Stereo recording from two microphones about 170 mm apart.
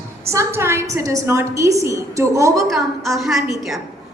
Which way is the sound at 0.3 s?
15° right (ahead or behind).